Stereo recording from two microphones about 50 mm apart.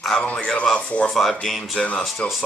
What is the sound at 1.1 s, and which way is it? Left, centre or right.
Speech, centre.